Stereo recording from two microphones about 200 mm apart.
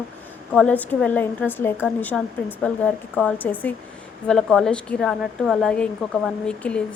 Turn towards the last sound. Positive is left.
turn(degrees=5)  # may be behind; listen again after turning